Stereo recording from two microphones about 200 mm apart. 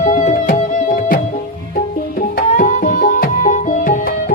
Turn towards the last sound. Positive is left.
turn(degrees=40)  # may be behind; listen again after turning